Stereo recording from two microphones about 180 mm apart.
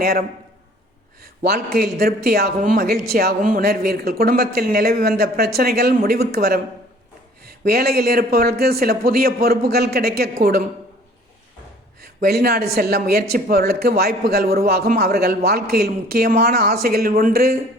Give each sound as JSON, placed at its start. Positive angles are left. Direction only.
{"t": 0.0, "sound": "a man's voice", "side_deg": -55}
{"t": 1.5, "sound": "a man's voice", "side_deg": -60}
{"t": 12.2, "sound": "a man's voice", "side_deg": -55}